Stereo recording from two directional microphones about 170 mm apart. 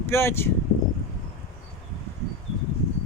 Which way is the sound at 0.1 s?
15° left (ahead or behind).